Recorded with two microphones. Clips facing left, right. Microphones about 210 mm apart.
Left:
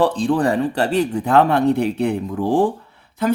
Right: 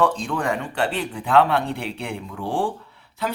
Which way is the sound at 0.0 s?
35° left (ahead or behind).